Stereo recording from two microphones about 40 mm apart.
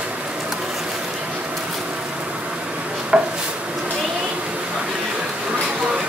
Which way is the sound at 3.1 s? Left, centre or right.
Right.